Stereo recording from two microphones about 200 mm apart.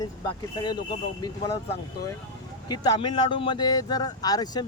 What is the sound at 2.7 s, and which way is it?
Speech, 20° left (ahead or behind).